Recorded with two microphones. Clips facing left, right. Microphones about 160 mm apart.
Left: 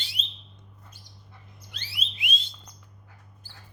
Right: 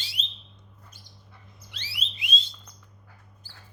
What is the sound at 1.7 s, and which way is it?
Alarm, 55° left (ahead or behind).